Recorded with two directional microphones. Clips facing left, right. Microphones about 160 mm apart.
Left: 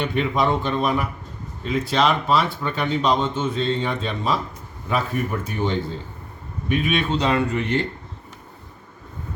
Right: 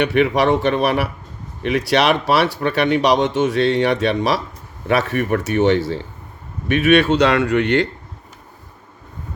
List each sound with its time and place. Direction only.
0.0 s a man's voice: 80° right